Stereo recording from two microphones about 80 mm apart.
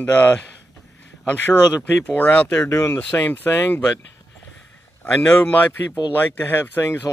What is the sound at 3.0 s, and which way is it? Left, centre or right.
Speech, centre.